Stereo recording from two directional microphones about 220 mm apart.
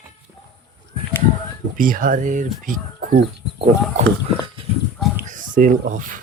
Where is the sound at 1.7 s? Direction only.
40° right (ahead or behind).